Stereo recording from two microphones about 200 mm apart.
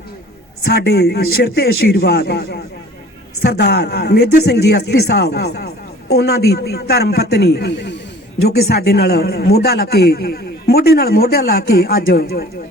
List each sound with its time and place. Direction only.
0.6 s a man's voice: 55° left (ahead or behind)